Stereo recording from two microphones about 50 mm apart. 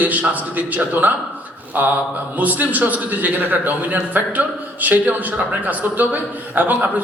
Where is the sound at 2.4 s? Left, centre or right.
Right.